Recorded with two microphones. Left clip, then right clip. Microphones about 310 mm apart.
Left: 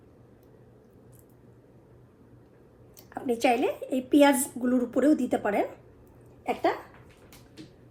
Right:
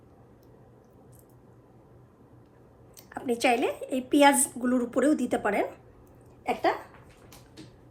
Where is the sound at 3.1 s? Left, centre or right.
Right.